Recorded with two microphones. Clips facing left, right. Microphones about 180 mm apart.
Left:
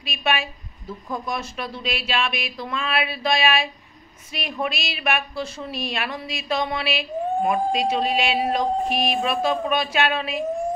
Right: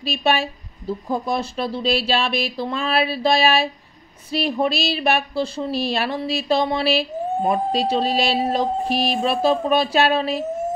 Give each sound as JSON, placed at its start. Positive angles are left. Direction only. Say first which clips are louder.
{"t": 0.0, "sound": "speech", "louder": "right 5 dB", "side_deg": -35}